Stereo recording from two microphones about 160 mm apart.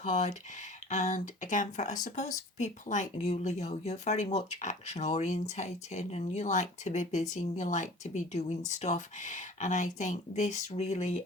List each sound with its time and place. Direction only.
0.0 s speech: 50° left (ahead or behind)